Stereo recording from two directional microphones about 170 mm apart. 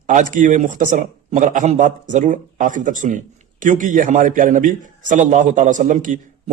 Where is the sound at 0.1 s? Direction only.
50° right (ahead or behind).